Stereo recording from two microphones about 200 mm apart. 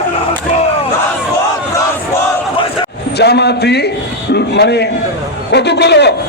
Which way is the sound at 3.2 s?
55° left (ahead or behind).